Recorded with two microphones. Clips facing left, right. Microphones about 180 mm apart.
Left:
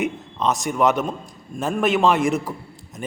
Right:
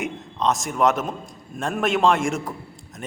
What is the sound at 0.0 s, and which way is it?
A man's voice, centre (ahead or behind).